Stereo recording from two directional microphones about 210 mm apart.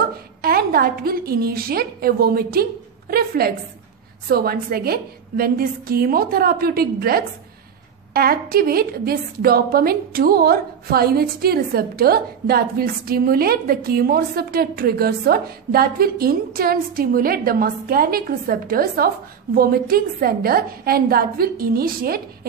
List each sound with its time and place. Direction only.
0.4 s a woman's voice: 45° right (ahead or behind)